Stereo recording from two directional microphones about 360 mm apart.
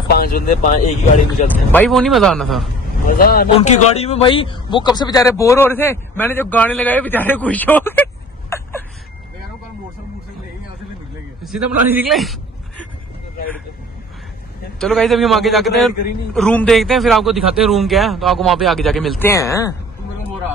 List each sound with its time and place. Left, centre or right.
0.1 s speech: left
1.7 s a man's voice: centre
3.1 s a man's voice: left; by 8.8 s centre
11.4 s a man's voice: centre
14.8 s a man's voice: centre